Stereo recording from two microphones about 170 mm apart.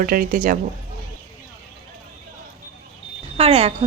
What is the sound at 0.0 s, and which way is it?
Speech, 55° right (ahead or behind).